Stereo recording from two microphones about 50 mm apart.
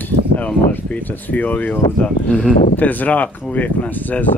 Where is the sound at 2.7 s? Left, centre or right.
Left.